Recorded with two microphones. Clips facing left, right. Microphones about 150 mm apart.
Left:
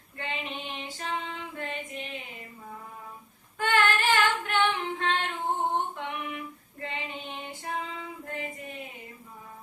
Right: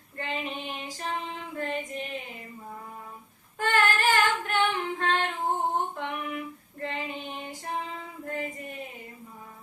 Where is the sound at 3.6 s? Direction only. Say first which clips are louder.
Even; 40° right (ahead or behind).